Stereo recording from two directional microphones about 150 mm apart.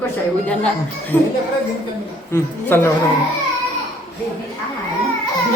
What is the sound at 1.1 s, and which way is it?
Speech, 15° left (ahead or behind).